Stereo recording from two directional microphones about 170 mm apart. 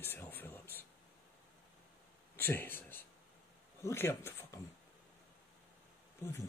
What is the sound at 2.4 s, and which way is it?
Speech, 10° left (ahead or behind).